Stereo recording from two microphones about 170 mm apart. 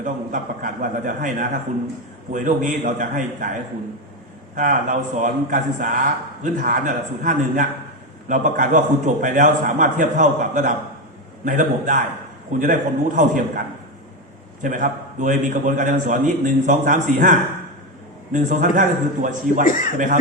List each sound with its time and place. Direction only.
0.0 s a man's voice: 50° right (ahead or behind)
14.6 s a man's voice: 50° right (ahead or behind)
19.6 s speech: 50° left (ahead or behind)